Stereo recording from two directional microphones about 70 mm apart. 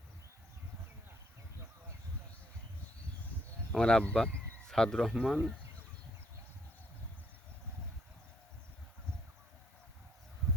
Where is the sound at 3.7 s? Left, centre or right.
Centre.